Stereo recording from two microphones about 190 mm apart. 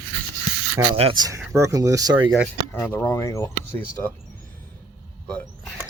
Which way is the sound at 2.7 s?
10° left (ahead or behind).